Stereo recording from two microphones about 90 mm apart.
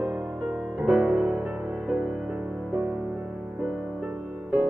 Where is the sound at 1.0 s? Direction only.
20° right (ahead or behind).